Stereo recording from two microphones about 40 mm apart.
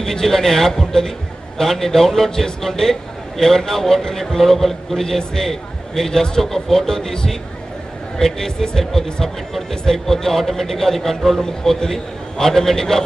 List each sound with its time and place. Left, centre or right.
0.0 s a man's voice: centre